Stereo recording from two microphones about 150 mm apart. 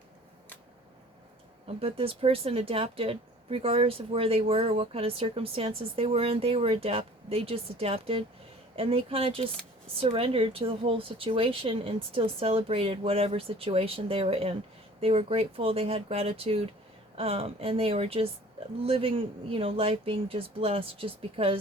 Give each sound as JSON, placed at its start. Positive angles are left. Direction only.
{"t": 1.6, "sound": "speech", "side_deg": -40}